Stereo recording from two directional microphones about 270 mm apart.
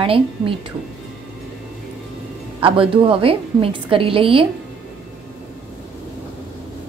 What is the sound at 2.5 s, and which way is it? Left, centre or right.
A woman's voice, centre.